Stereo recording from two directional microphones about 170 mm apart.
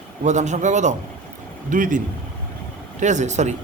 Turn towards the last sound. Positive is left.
turn(degrees=-45)  # may be behind; listen again after turning